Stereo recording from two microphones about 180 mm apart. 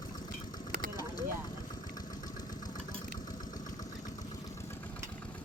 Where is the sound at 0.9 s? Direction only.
20° left (ahead or behind).